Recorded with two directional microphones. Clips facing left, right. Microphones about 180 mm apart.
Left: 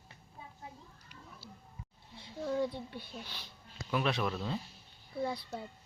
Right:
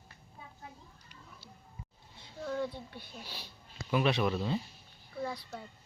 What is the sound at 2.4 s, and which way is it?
Speech, 20° left (ahead or behind).